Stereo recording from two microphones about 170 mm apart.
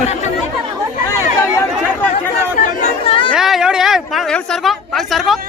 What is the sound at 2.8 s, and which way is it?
Chatter, 35° left (ahead or behind).